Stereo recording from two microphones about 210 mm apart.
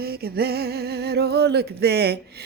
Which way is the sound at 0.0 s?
45° right (ahead or behind).